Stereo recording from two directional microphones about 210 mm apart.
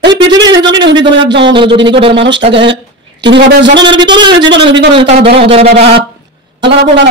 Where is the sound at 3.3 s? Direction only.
55° right (ahead or behind).